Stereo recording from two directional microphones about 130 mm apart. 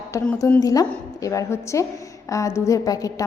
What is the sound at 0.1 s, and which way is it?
A woman's voice, 25° left (ahead or behind).